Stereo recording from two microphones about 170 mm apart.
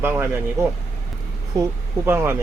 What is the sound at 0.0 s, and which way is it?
Speech, 10° right (ahead or behind).